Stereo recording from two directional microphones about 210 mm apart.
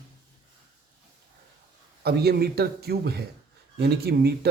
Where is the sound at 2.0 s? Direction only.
50° right (ahead or behind).